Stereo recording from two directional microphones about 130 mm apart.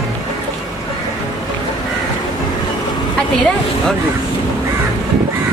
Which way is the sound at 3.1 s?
5° left (ahead or behind).